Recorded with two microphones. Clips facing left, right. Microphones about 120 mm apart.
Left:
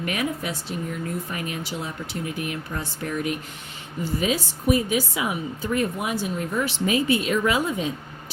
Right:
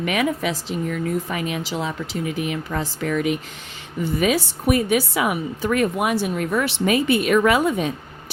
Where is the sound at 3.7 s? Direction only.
65° right (ahead or behind).